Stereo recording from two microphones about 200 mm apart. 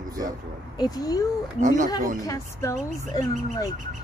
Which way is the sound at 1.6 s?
40° right (ahead or behind).